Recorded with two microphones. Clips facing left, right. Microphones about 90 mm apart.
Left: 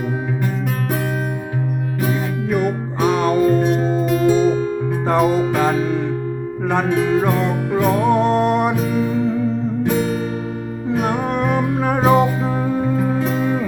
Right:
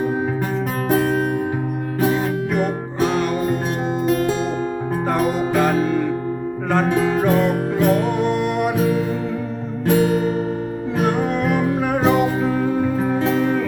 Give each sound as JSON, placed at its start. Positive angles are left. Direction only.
{"t": 8.1, "sound": "music", "side_deg": 35}
{"t": 12.0, "sound": "music", "side_deg": 25}